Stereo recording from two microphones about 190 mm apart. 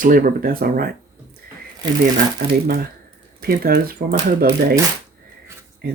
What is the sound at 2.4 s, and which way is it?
Speech, 55° right (ahead or behind).